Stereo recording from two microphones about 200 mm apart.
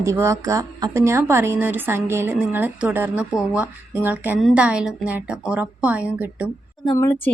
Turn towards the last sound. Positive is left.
turn(degrees=15)  # may be behind; listen again after turning